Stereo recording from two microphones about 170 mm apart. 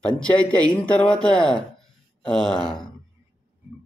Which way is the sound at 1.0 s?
5° left (ahead or behind).